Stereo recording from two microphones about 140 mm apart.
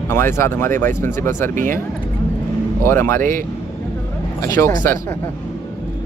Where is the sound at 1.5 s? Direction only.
75° right (ahead or behind).